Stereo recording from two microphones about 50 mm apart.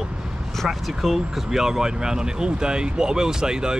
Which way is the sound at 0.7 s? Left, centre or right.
Centre.